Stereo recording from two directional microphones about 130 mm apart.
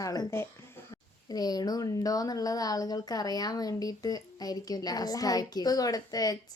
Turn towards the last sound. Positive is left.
turn(degrees=30)  # may be behind; listen again after turning